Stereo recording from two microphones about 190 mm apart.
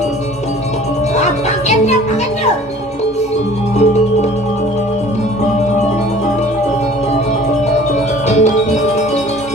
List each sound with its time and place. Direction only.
1.1 s music: 35° left (ahead or behind)
8.3 s music: 35° left (ahead or behind)